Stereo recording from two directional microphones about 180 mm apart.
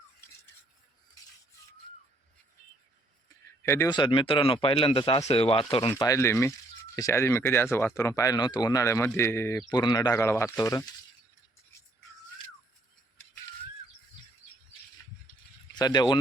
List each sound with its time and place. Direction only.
3.7 s speech: 15° left (ahead or behind)
3.9 s speech: 25° left (ahead or behind)
6.0 s speech: 15° left (ahead or behind)
15.7 s speech: 25° left (ahead or behind)